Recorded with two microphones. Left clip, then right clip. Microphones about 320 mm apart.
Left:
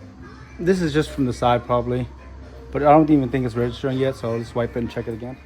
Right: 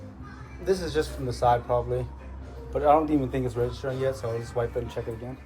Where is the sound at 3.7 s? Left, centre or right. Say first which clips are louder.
Left 6 dB; centre.